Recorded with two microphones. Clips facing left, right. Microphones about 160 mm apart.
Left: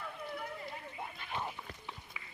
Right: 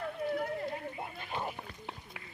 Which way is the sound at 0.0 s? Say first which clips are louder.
Right 8 dB; 55° right (ahead or behind).